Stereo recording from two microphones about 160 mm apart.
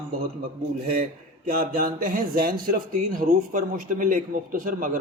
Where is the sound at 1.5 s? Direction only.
65° right (ahead or behind).